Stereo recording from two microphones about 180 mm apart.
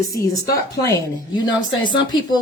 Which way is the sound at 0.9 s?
20° left (ahead or behind).